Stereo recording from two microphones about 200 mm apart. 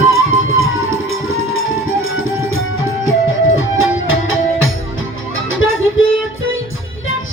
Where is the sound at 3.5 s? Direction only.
85° left.